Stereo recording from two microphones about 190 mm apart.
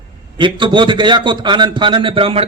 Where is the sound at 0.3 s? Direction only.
25° right (ahead or behind).